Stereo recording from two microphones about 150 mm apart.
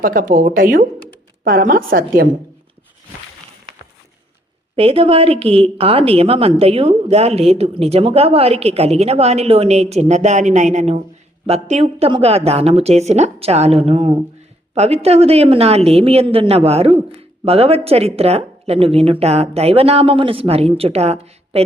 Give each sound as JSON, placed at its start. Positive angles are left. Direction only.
{"t": 0.0, "sound": "a woman's voice", "side_deg": -70}
{"t": 4.8, "sound": "a woman's voice", "side_deg": -40}